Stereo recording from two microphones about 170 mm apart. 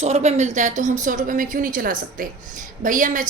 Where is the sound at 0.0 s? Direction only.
40° right (ahead or behind).